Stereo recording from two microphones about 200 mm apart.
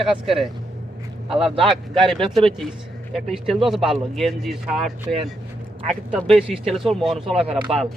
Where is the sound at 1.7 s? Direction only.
Centre (ahead or behind).